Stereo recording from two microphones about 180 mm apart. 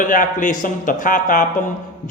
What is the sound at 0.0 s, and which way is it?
A man's voice, 50° left (ahead or behind).